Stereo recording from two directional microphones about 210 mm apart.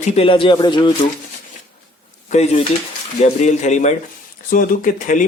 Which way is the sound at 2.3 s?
30° left (ahead or behind).